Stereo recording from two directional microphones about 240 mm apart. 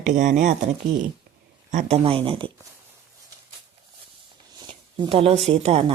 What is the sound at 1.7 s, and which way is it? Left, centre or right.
Speech, right.